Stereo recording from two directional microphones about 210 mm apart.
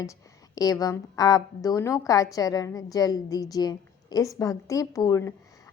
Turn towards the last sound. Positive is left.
turn(degrees=15)  # may be behind; listen again after turning